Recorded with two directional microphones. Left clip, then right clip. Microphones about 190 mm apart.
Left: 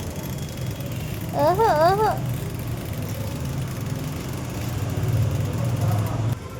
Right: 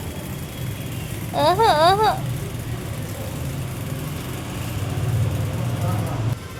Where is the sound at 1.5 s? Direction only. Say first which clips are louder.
Right 3 dB; 15° left (ahead or behind).